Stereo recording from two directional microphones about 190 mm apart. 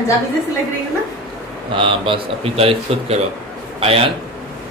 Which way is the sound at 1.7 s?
30° right (ahead or behind).